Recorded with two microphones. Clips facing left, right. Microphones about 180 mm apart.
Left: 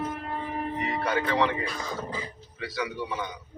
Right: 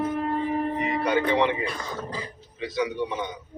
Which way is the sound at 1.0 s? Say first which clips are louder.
Right 3 dB; 20° right (ahead or behind).